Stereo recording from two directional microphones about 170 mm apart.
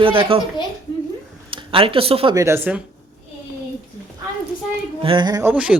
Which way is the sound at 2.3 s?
15° right (ahead or behind).